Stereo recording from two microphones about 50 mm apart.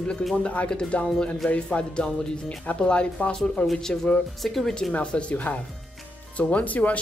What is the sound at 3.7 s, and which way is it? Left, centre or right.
Speech, centre.